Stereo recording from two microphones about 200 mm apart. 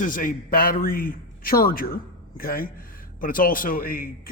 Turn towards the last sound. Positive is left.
turn(degrees=45)  # may be behind; listen again after turning